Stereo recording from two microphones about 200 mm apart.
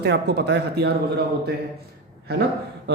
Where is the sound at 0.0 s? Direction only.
55° right (ahead or behind).